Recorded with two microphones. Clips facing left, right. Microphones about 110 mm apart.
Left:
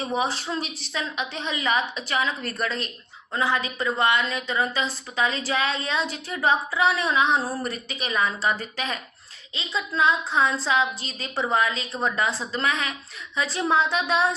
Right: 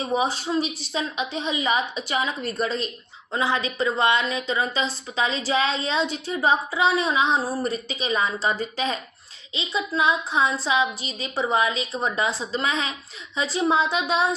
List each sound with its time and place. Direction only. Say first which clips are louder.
0.0 s a woman's voice: right 2 dB; 15° right (ahead or behind)
10.0 s a woman's voice: left 1 dB; 15° right (ahead or behind)